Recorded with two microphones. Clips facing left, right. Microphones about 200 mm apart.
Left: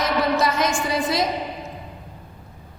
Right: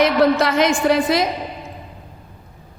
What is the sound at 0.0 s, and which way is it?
A woman's voice, 65° right (ahead or behind).